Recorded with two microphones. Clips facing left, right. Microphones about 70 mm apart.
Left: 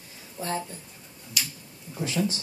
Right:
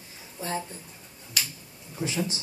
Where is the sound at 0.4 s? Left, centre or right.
Centre.